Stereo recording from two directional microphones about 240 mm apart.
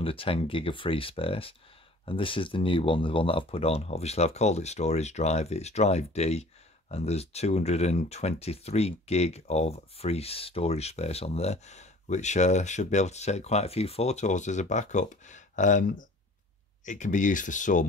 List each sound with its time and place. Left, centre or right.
0.0 s speech: left